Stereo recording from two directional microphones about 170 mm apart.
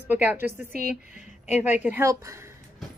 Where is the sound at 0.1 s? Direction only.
10° right (ahead or behind).